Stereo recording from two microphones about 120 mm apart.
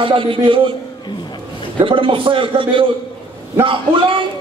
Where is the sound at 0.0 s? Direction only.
45° right (ahead or behind).